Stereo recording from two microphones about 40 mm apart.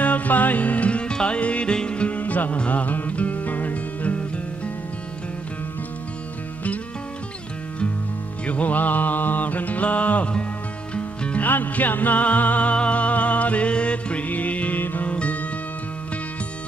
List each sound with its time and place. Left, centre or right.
0.0 s music: left
8.5 s music: left
11.4 s music: left
14.2 s music: left
14.8 s music: left
15.0 s music: left